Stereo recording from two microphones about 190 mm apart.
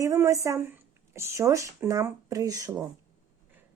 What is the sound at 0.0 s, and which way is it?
Speech, 15° right (ahead or behind).